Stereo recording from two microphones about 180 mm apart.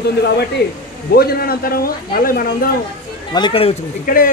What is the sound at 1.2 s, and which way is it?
Speech, 55° left (ahead or behind).